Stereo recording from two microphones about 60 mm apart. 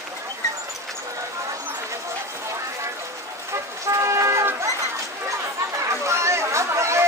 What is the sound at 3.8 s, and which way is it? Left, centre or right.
Vehicle, right.